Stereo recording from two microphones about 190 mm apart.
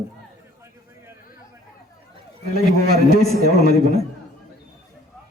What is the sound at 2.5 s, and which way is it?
A man's voice, 55° right (ahead or behind).